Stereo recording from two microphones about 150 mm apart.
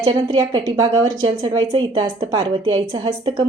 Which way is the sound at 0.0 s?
30° right (ahead or behind).